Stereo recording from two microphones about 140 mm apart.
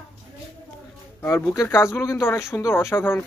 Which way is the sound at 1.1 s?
15° left (ahead or behind).